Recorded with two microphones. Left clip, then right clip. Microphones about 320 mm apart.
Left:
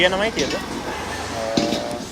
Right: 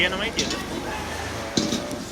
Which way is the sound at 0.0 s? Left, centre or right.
Centre.